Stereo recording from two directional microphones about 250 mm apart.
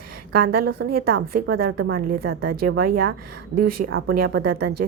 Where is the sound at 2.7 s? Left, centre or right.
Right.